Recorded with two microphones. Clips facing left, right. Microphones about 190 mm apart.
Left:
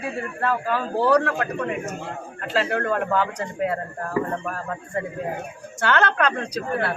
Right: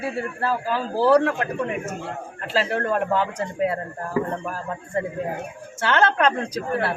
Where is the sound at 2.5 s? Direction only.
30° right (ahead or behind).